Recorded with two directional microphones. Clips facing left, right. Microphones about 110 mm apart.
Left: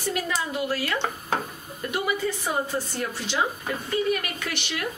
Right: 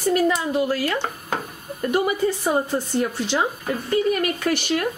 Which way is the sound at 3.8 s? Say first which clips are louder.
Right 5 dB; 40° right (ahead or behind).